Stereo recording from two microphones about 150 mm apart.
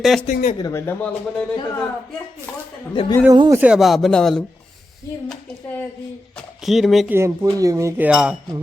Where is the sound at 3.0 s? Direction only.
40° left (ahead or behind).